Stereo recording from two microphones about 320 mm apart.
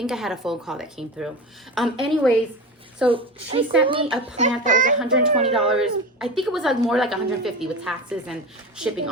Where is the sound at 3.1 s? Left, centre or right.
Centre.